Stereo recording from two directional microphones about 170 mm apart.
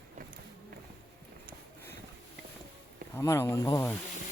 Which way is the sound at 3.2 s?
15° left (ahead or behind).